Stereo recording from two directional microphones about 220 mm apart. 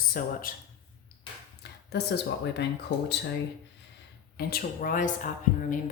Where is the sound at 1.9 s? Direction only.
50° left (ahead or behind).